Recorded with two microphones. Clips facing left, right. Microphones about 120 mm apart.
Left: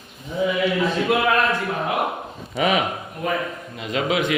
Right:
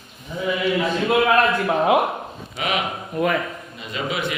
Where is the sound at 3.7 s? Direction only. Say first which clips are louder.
Left 6 dB; 90° left.